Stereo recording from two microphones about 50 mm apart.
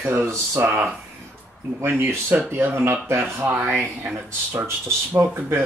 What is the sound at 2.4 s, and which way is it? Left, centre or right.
Speech, right.